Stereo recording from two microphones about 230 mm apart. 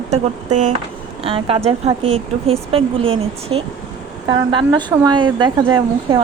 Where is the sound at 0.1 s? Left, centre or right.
Right.